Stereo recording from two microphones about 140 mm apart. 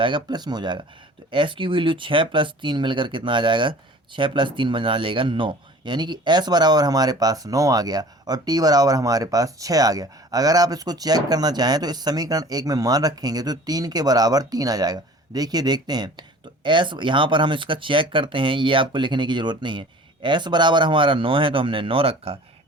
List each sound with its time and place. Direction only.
0.0 s speech: 30° right (ahead or behind)